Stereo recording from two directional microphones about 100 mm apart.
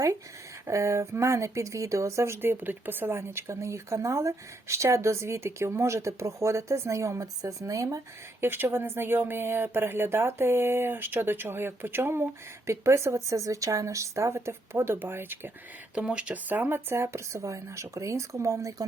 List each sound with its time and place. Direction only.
0.7 s speech: 30° right (ahead or behind)
16.0 s speech: 10° right (ahead or behind); by 18.9 s 30° right (ahead or behind)